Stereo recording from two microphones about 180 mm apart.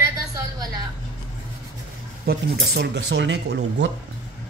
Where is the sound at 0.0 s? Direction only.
20° right (ahead or behind).